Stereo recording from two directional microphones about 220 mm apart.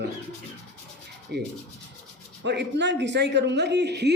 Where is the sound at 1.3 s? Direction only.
50° right (ahead or behind).